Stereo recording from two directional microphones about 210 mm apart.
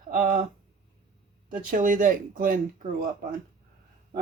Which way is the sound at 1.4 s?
40° right (ahead or behind).